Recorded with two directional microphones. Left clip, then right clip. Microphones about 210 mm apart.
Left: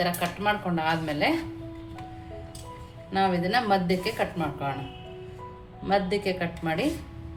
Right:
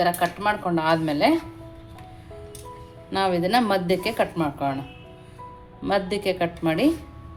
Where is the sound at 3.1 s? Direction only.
35° right (ahead or behind).